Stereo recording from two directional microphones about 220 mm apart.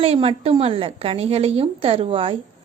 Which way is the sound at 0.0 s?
25° right (ahead or behind).